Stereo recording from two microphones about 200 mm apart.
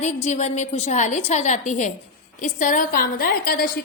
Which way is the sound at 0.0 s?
35° left (ahead or behind).